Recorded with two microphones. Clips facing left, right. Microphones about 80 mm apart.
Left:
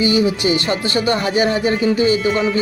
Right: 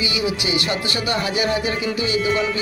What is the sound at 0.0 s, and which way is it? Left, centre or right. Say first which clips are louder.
Speech: left 7 dB; left.